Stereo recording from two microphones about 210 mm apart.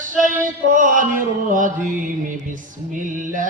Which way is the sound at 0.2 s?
40° right (ahead or behind).